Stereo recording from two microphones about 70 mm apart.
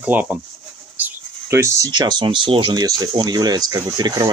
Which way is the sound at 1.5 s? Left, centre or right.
Right.